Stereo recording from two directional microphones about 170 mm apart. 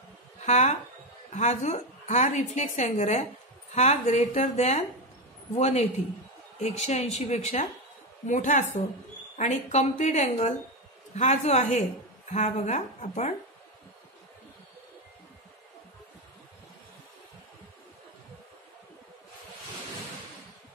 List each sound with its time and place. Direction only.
0.4 s a woman's voice: 45° left (ahead or behind)